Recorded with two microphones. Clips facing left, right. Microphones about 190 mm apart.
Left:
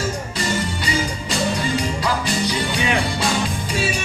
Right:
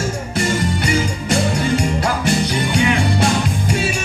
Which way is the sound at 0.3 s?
55° right (ahead or behind).